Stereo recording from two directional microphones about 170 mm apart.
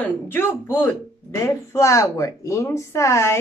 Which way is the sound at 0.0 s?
10° left (ahead or behind).